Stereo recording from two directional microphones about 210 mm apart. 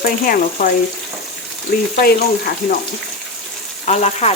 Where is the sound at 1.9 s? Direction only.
45° left (ahead or behind).